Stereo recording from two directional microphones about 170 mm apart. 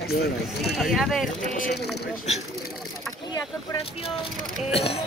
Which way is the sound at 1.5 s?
65° left (ahead or behind).